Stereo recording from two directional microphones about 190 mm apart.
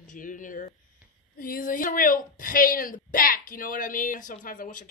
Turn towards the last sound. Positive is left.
turn(degrees=45)  # may be behind; listen again after turning